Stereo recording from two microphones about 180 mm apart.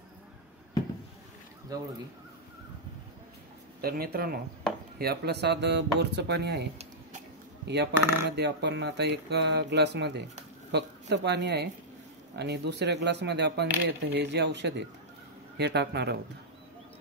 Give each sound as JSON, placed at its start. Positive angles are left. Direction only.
{"t": 1.7, "sound": "speech", "side_deg": -20}
{"t": 3.8, "sound": "speech", "side_deg": -55}
{"t": 7.6, "sound": "speech", "side_deg": -70}